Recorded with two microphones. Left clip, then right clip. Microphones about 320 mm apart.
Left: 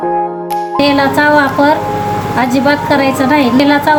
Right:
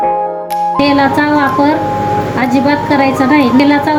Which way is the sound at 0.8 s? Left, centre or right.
Left.